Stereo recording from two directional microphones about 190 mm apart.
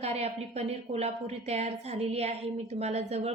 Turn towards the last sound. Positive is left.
turn(degrees=-35)  # may be behind; listen again after turning